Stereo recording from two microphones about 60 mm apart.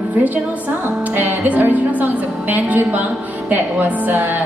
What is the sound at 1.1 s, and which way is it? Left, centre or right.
Music, right.